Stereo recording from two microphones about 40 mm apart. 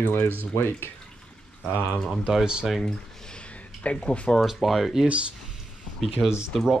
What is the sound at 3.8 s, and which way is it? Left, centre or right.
Speech, left.